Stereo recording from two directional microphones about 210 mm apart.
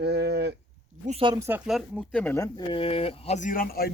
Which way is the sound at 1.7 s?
Centre (ahead or behind).